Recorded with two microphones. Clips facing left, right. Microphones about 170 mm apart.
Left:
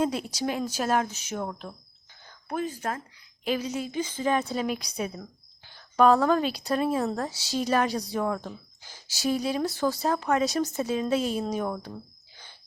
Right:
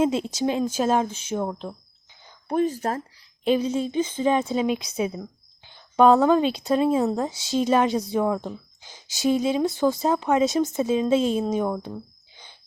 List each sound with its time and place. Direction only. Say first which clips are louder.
0.0 s speech: right 5 dB; 25° right (ahead or behind)
2.5 s speech: right 7 dB; 35° right (ahead or behind)
5.1 s speech: right 6 dB; 15° right (ahead or behind)